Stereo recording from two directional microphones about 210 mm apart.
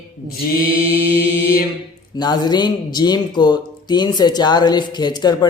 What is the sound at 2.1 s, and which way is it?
Speech, 20° left (ahead or behind).